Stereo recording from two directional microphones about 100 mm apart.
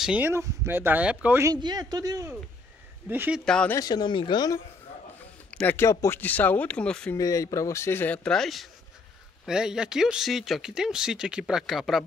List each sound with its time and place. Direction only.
0.0 s speech: 10° right (ahead or behind)
0.3 s speech: 25° right (ahead or behind)
1.6 s speech: 45° right (ahead or behind)
3.1 s speech: 20° right (ahead or behind)
3.4 s speech: 5° left (ahead or behind)
3.8 s speech: 50° left (ahead or behind)
5.5 s a sound: 10° left (ahead or behind)
5.8 s speech: 30° left (ahead or behind)
6.1 s speech: 15° left (ahead or behind)
7.2 s speech: 35° left (ahead or behind); by 12.0 s centre (ahead or behind)